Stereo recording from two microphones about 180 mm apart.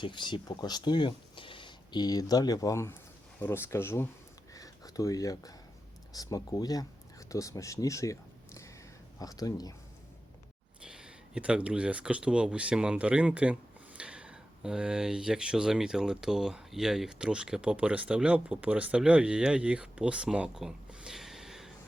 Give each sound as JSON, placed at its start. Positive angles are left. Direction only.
{"t": 0.0, "sound": "speech", "side_deg": 25}
{"t": 10.8, "sound": "speech", "side_deg": -5}